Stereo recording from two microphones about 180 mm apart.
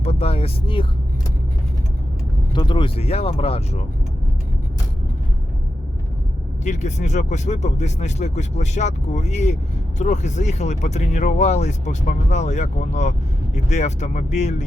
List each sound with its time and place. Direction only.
0.0 s speech: 35° left (ahead or behind)
2.5 s speech: 25° left (ahead or behind)
6.7 s speech: 40° left (ahead or behind)